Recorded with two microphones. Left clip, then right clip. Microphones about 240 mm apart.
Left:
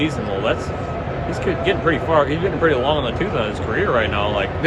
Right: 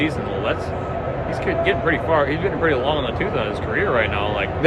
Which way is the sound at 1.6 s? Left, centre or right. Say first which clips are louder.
Left 2 dB; centre.